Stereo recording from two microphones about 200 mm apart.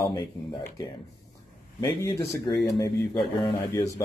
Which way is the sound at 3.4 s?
15° left (ahead or behind).